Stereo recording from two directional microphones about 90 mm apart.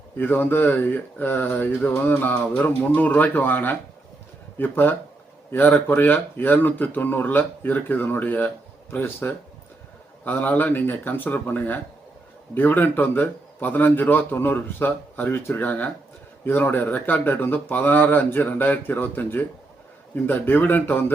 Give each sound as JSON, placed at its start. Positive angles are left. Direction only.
{"t": 0.2, "sound": "speech", "side_deg": 20}